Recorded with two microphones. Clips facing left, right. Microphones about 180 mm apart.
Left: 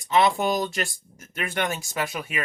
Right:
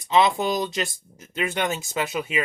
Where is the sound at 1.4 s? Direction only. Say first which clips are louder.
Right 2 dB; 20° right (ahead or behind).